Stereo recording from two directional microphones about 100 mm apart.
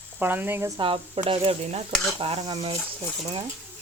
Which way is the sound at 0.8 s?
65° right (ahead or behind).